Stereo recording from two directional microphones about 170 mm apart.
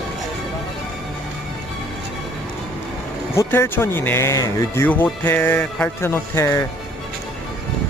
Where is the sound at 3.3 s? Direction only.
15° left (ahead or behind).